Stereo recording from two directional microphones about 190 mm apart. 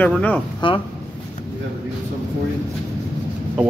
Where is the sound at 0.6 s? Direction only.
25° left (ahead or behind).